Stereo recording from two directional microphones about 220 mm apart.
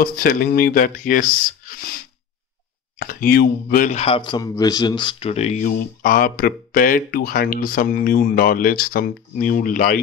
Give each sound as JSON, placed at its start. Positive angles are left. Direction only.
{"t": 0.0, "sound": "speech", "side_deg": 40}
{"t": 1.7, "sound": "a sound", "side_deg": 40}
{"t": 3.0, "sound": "speech", "side_deg": 40}